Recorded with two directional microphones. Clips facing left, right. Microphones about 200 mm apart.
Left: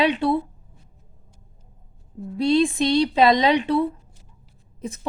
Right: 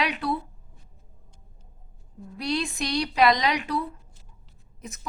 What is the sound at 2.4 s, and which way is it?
Speech, 25° left (ahead or behind).